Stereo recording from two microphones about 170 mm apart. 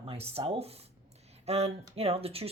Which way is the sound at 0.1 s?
35° right (ahead or behind).